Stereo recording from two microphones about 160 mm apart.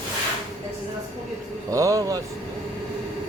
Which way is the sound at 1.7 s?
20° right (ahead or behind).